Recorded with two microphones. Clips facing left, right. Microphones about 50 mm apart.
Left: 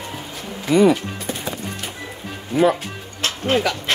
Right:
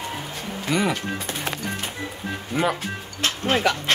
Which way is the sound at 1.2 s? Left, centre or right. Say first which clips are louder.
Left 1 dB; right.